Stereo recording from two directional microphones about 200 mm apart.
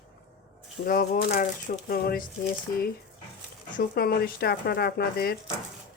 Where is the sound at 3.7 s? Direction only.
45° left (ahead or behind).